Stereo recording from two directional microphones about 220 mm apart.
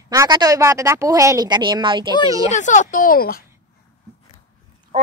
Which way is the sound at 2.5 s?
35° left (ahead or behind).